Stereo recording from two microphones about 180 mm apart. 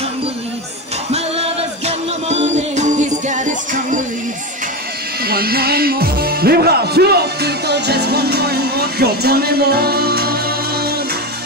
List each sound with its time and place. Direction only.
1.1 s music: 35° right (ahead or behind)
5.2 s speech: 60° right (ahead or behind)